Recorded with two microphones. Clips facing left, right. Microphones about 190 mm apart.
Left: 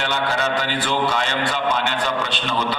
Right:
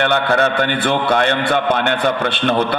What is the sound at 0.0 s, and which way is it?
A man's voice, 60° right (ahead or behind).